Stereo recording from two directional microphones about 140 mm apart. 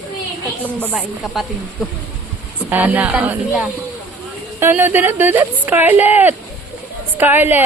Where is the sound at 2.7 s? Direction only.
10° right (ahead or behind).